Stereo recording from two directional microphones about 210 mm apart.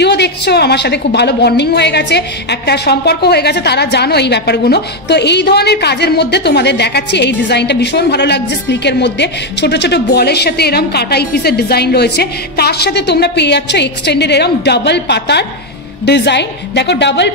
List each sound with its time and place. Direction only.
0.0 s a woman's voice: 55° left (ahead or behind)